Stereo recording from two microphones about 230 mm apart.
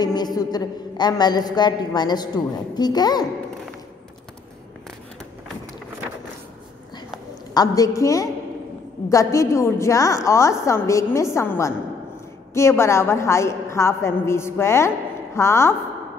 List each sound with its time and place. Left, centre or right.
0.0 s a woman's voice: centre
7.5 s a woman's voice: centre